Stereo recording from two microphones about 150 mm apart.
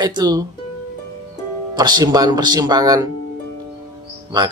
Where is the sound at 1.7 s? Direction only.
25° right (ahead or behind).